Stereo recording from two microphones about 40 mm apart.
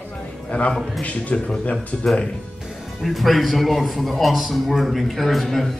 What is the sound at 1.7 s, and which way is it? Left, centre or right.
Speech, centre.